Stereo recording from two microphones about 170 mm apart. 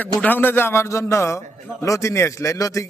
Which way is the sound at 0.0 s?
10° left (ahead or behind).